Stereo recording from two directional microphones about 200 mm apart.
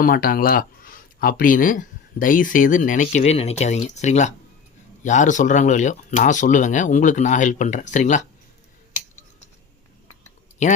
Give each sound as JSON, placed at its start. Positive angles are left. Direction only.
{"t": 0.0, "sound": "speech", "side_deg": 45}